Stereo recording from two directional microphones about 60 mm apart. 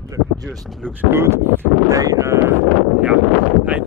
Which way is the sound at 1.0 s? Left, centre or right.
Right.